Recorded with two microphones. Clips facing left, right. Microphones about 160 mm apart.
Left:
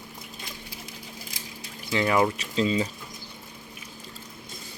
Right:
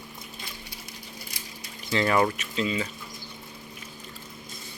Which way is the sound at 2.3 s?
30° left (ahead or behind).